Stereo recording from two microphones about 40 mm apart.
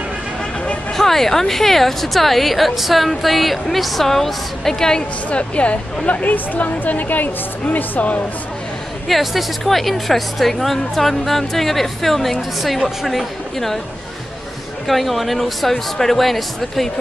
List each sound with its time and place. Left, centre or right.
0.9 s a woman's voice: centre
5.3 s speech: left
6.3 s a woman's voice: left
9.0 s a woman's voice: centre
14.9 s a woman's voice: centre